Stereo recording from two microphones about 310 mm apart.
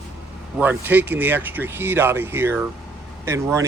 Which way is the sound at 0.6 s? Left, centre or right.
Centre.